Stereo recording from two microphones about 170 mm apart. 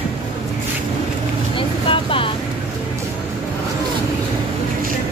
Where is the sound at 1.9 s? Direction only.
30° left (ahead or behind).